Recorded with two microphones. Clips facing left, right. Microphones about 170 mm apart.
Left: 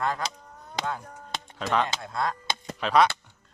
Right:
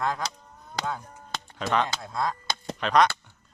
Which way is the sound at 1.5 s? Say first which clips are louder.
Even; centre (ahead or behind).